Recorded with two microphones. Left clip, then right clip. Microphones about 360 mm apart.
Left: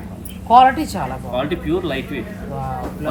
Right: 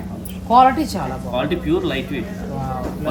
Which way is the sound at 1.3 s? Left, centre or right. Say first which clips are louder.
Right 1 dB; centre.